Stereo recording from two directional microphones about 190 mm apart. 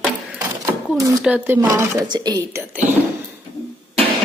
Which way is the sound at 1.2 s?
5° right (ahead or behind).